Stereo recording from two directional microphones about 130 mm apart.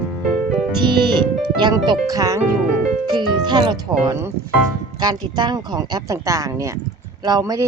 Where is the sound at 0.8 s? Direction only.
35° right (ahead or behind).